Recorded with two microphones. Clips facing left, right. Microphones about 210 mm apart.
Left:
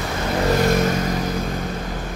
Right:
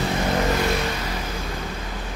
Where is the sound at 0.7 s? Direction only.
45° left (ahead or behind).